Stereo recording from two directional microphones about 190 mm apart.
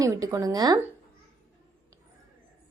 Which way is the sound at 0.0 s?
15° right (ahead or behind).